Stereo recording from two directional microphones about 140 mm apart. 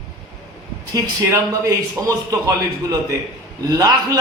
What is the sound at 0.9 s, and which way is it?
A man's voice, 25° right (ahead or behind).